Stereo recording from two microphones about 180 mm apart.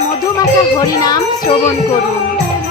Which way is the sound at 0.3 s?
20° left (ahead or behind).